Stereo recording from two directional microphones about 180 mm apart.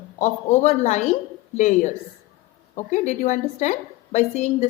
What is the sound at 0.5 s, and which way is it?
A woman's voice, 40° left (ahead or behind).